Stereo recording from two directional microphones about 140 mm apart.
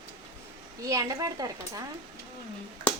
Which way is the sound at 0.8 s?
25° right (ahead or behind).